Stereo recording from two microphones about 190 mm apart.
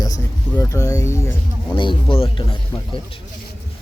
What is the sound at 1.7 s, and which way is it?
Speech, 25° left (ahead or behind).